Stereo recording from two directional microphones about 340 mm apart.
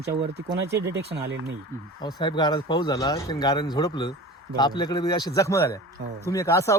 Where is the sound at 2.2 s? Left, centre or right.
Centre.